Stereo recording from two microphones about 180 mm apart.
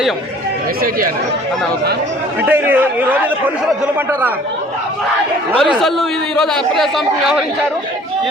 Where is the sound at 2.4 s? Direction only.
10° right (ahead or behind).